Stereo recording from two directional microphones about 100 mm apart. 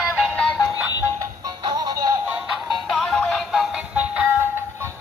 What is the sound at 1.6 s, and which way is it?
Music, 45° right (ahead or behind).